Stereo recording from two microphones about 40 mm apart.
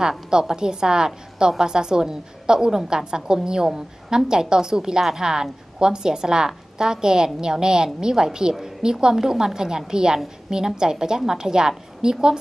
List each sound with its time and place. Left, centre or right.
0.3 s a woman's voice: centre